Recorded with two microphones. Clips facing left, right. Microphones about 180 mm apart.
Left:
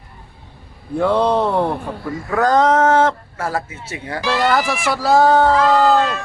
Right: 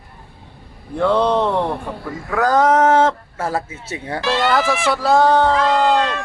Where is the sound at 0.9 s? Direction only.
10° left (ahead or behind).